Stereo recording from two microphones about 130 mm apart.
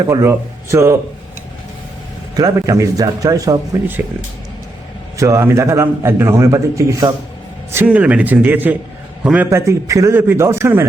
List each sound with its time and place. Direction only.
0.0 s a man's voice: 25° right (ahead or behind)
2.3 s a man's voice: 25° right (ahead or behind)
5.1 s a man's voice: 25° right (ahead or behind)
9.5 s a man's voice: 20° right (ahead or behind)